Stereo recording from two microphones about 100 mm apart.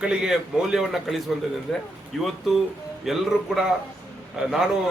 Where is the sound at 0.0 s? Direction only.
10° right (ahead or behind).